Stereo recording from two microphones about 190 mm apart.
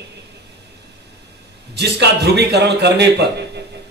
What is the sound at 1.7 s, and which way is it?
A man's voice, 60° right (ahead or behind).